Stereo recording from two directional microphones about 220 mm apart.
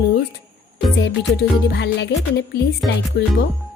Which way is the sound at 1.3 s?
50° left (ahead or behind).